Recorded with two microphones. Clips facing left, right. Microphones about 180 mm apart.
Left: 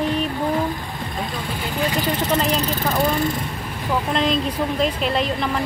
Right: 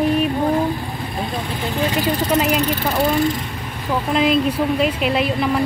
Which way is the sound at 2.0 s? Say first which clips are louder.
Right 3 dB; 10° right (ahead or behind).